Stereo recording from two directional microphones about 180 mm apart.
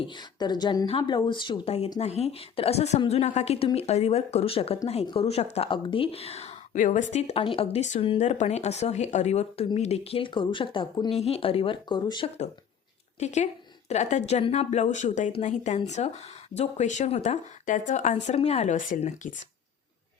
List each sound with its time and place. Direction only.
0.0 s a woman's voice: 25° left (ahead or behind)
13.1 s speech: 40° left (ahead or behind)